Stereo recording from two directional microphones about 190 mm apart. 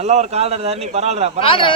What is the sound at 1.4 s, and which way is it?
Speech, 30° left (ahead or behind).